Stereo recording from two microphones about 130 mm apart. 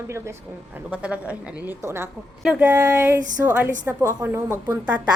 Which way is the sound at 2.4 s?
10° right (ahead or behind).